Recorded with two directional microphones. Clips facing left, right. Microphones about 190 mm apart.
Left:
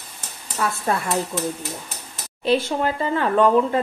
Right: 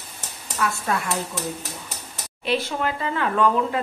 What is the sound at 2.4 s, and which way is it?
Speech, 30° left (ahead or behind).